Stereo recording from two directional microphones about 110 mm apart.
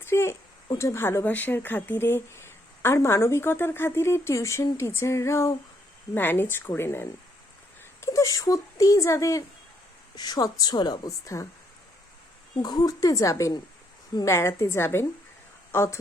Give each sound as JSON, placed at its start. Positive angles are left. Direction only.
{"t": 0.0, "sound": "a sound", "side_deg": 25}
{"t": 0.8, "sound": "a woman's voice", "side_deg": 25}
{"t": 11.3, "sound": "speech", "side_deg": 30}
{"t": 12.5, "sound": "a woman's voice", "side_deg": 40}